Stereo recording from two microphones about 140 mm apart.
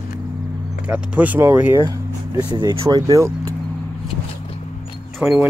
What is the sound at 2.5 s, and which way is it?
Speech, 30° right (ahead or behind).